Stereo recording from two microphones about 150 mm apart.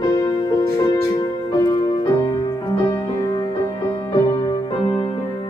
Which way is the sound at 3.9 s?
30° left (ahead or behind).